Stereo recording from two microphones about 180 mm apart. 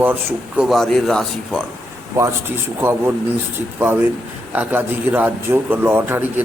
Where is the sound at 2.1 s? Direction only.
15° right (ahead or behind).